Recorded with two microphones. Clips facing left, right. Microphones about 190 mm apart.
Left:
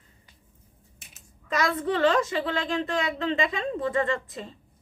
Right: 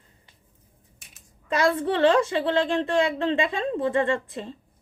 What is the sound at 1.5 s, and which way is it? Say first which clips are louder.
A woman's voice: right 3 dB; 30° right (ahead or behind).